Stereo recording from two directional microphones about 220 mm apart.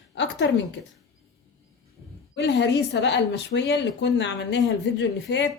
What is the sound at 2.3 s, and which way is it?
A woman's voice, 50° left (ahead or behind).